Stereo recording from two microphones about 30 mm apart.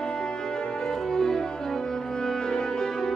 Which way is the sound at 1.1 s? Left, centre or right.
Centre.